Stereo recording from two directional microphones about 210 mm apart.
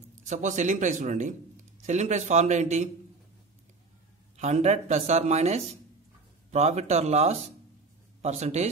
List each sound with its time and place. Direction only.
0.3 s speech: 35° right (ahead or behind)
4.4 s speech: 30° right (ahead or behind)